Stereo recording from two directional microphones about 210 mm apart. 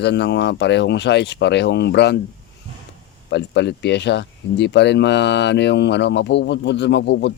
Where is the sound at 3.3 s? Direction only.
55° left (ahead or behind).